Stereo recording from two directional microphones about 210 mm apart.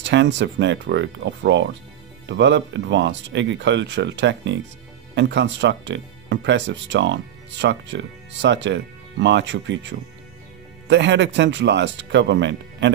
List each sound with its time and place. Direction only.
0.0 s speech: 55° right (ahead or behind)